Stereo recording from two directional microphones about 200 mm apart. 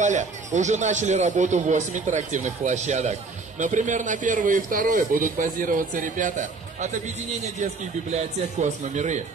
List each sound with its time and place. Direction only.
0.0 s speech: 35° right (ahead or behind)